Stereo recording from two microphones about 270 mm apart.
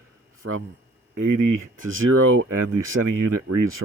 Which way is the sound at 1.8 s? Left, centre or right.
Right.